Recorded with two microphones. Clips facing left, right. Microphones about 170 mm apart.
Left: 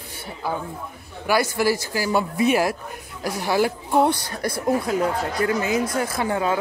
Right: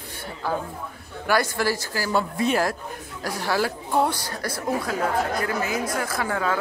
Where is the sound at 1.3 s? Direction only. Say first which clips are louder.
Left 2 dB; 10° left (ahead or behind).